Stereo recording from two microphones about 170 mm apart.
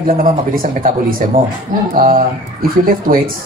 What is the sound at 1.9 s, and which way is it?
Speech, 55° right (ahead or behind).